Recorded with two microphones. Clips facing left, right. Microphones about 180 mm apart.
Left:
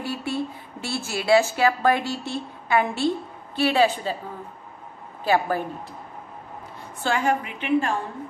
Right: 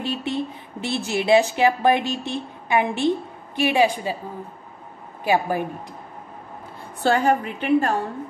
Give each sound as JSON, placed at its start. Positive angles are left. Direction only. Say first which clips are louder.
{"t": 0.0, "sound": "speech", "louder": "right 2 dB", "side_deg": -20}
{"t": 5.2, "sound": "a woman's voice", "louder": "right 1 dB", "side_deg": -15}
{"t": 7.0, "sound": "a woman's voice", "louder": "right 4 dB", "side_deg": -35}